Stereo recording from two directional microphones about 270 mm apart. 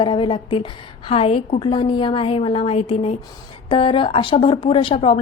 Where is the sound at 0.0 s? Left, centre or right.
Centre.